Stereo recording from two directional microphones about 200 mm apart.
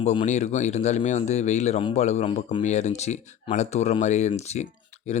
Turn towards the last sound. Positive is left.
turn(degrees=35)  # may be behind; listen again after turning